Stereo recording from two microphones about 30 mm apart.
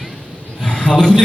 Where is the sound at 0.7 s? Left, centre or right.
Left.